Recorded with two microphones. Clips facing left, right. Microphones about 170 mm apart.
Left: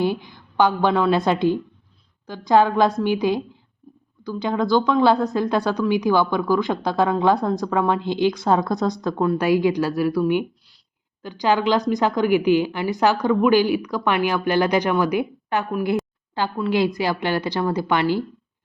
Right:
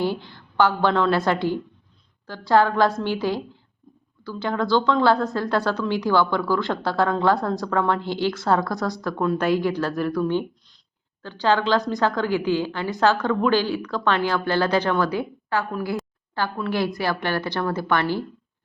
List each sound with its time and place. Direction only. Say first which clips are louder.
0.0 s a woman's voice: left 2 dB; 15° left (ahead or behind)
9.2 s a woman's voice: left 3 dB; 5° left (ahead or behind)